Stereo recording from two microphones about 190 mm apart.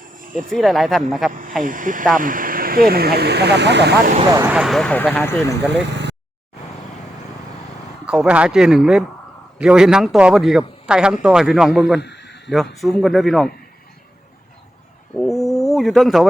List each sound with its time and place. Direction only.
0.3 s speech: centre (ahead or behind)
1.3 s speech: 45° right (ahead or behind); by 4.1 s 65° right (ahead or behind)
4.4 s speech: 5° right (ahead or behind); by 5.5 s 10° left (ahead or behind)
8.0 s speech: 5° right (ahead or behind)
11.9 s a sound: 65° left (ahead or behind)
12.7 s speech: centre (ahead or behind)
15.1 s wild animals: centre (ahead or behind)